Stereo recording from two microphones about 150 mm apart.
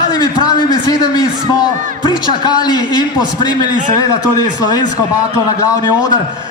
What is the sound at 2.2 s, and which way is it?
A man's voice, 30° left (ahead or behind).